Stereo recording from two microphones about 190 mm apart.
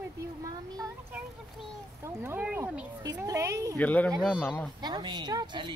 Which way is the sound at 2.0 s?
10° right (ahead or behind).